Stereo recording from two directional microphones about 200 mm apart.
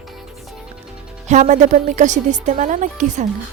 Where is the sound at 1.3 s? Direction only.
35° right (ahead or behind).